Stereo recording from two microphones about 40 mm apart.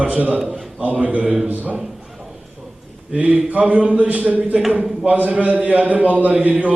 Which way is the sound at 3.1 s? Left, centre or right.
Right.